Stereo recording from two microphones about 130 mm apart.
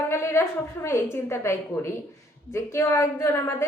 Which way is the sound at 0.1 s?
20° left (ahead or behind).